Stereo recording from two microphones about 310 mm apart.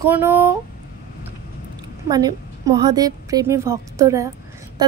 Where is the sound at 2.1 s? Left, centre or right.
Centre.